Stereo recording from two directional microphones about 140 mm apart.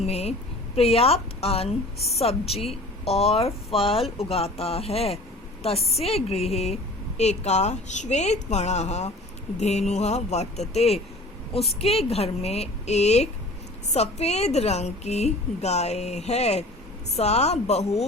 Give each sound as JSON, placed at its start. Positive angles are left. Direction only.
{"t": 0.0, "sound": "a woman's voice", "side_deg": 50}